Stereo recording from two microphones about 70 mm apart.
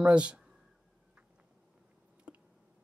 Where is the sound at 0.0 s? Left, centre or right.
Centre.